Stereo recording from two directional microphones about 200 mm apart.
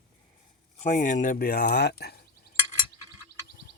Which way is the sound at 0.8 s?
40° left (ahead or behind).